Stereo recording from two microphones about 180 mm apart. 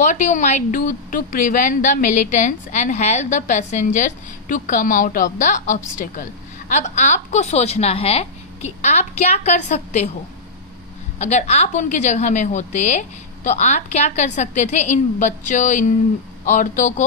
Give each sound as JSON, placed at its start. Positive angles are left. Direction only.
{"t": 0.0, "sound": "a woman's voice", "side_deg": 45}
{"t": 11.1, "sound": "a woman's voice", "side_deg": 40}